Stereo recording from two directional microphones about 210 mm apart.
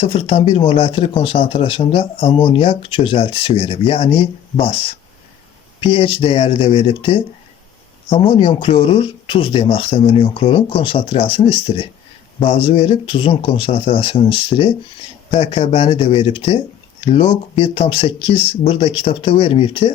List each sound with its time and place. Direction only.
0.0 s speech: 25° left (ahead or behind)